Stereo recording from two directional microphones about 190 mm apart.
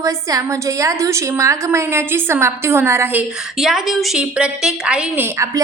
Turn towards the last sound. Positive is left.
turn(degrees=-15)  # may be behind; listen again after turning